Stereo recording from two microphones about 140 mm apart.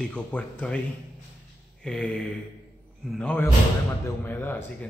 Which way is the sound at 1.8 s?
5° left (ahead or behind).